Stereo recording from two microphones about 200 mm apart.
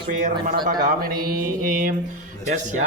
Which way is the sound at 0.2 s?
40° right (ahead or behind).